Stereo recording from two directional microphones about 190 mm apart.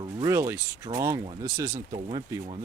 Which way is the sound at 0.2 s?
15° right (ahead or behind).